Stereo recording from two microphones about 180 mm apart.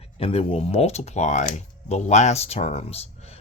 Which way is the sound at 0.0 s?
30° left (ahead or behind).